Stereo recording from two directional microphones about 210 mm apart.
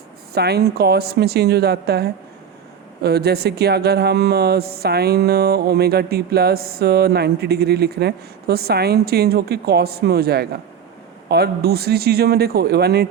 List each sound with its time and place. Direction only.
0.3 s speech: 50° right (ahead or behind)